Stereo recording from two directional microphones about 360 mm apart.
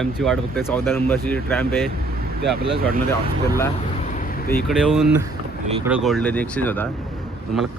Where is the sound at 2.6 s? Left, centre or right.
Right.